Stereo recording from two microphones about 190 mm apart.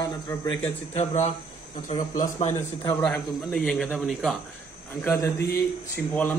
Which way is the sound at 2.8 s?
5° left (ahead or behind).